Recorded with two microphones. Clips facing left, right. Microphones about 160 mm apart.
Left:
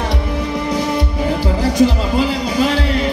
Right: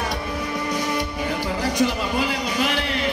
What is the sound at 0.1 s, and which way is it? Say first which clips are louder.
Music: left 6 dB; 25° left (ahead or behind).